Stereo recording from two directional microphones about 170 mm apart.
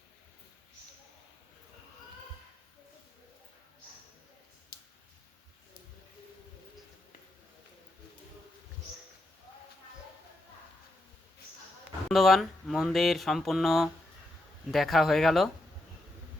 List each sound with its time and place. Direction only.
12.0 s speech: centre (ahead or behind)